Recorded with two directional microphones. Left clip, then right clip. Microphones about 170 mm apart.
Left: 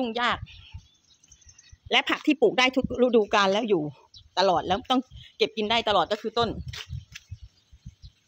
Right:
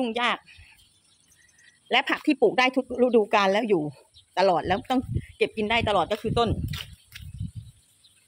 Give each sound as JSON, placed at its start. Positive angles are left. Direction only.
{"t": 0.0, "sound": "speech", "side_deg": 0}
{"t": 1.9, "sound": "speech", "side_deg": 5}
{"t": 6.6, "sound": "speech", "side_deg": -25}